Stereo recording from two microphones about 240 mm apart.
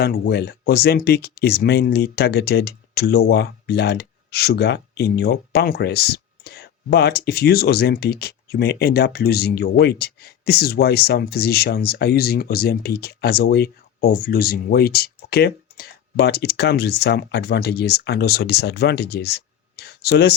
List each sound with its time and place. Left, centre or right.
0.0 s speech: left